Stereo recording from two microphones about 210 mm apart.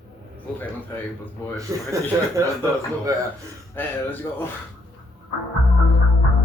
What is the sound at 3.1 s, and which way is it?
Speech, 15° right (ahead or behind).